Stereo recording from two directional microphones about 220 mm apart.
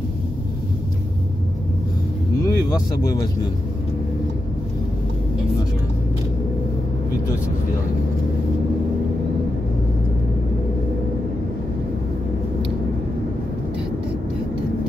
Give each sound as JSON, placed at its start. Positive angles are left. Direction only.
{"t": 2.4, "sound": "speech", "side_deg": 15}